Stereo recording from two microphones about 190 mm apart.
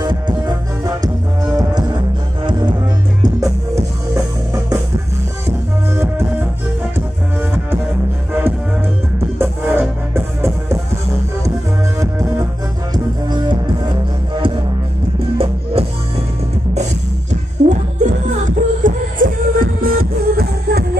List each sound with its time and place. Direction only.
0.8 s music: 20° right (ahead or behind)
8.3 s music: 10° right (ahead or behind)
12.9 s music: 25° right (ahead or behind)
15.3 s music: 30° right (ahead or behind)
17.6 s music: 40° right (ahead or behind)